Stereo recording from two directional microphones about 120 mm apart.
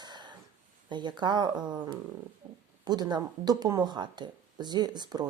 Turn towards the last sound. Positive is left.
turn(degrees=-35)  # may be behind; listen again after turning